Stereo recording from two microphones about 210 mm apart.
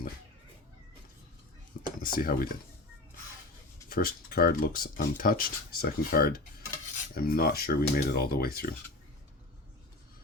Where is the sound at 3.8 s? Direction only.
45° left (ahead or behind).